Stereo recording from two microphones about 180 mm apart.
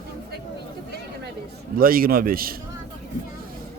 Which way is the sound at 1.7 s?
55° right (ahead or behind).